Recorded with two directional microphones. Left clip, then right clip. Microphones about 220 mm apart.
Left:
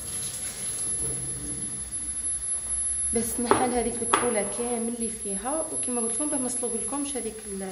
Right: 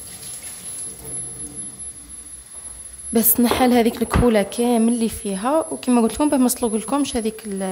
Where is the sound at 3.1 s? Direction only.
45° right (ahead or behind).